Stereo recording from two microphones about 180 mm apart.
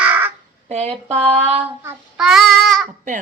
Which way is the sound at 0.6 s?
35° right (ahead or behind).